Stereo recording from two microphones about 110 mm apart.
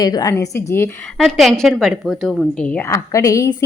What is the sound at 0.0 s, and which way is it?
Speech, 35° left (ahead or behind).